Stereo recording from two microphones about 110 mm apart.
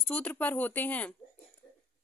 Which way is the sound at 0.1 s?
15° left (ahead or behind).